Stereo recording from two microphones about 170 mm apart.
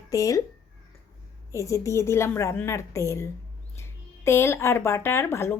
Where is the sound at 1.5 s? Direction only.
20° left (ahead or behind).